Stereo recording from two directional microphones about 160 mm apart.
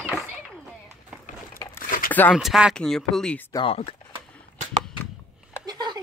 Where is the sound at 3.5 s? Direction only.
35° left (ahead or behind).